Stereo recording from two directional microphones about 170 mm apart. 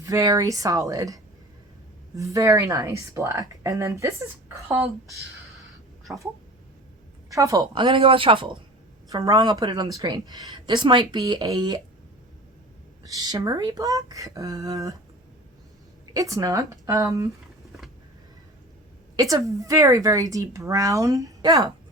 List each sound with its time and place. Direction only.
0.0 s a woman's voice: 20° right (ahead or behind)
7.3 s a woman's voice: 20° right (ahead or behind)
9.0 s a woman's voice: 20° right (ahead or behind)
13.1 s a woman's voice: 20° right (ahead or behind)
16.1 s a woman's voice: 20° right (ahead or behind)
19.1 s a woman's voice: 20° right (ahead or behind)